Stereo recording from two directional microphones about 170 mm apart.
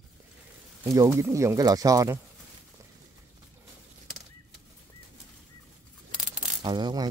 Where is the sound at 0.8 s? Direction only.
15° right (ahead or behind).